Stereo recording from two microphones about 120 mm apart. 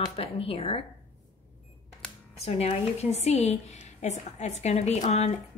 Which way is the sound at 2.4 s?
60° left (ahead or behind).